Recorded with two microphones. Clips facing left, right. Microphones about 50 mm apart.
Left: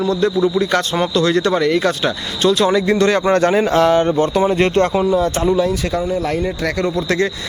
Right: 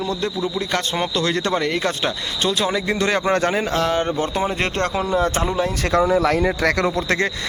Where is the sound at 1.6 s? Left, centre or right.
Centre.